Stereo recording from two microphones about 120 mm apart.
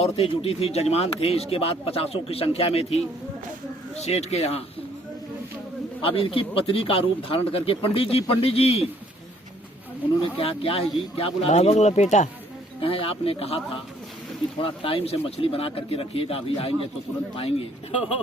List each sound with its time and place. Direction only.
0.0 s speech: 55° left (ahead or behind)
6.0 s a man's voice: 50° left (ahead or behind)
10.2 s speech: 50° left (ahead or behind); by 12.3 s 80° left
12.8 s a man's voice: 50° left (ahead or behind)